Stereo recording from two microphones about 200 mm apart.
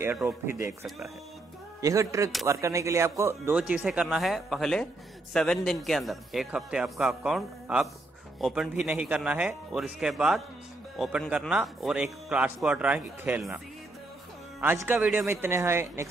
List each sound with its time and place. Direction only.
0.0 s a man's voice: 10° right (ahead or behind)
1.8 s a man's voice: 15° right (ahead or behind)
14.6 s speech: 10° right (ahead or behind)